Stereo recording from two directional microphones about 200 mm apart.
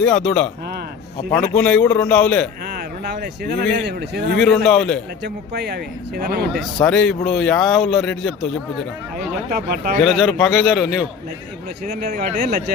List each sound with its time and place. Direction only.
0.0 s a man's voice: 5° left (ahead or behind)
3.1 s speech: 45° right (ahead or behind)
4.4 s a man's voice: centre (ahead or behind)
5.2 s speech: 55° right (ahead or behind)
6.8 s a man's voice: 5° left (ahead or behind)
9.5 s speech: 50° right (ahead or behind)
10.0 s a man's voice: centre (ahead or behind)